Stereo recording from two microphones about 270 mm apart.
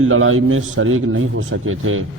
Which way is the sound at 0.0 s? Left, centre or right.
Right.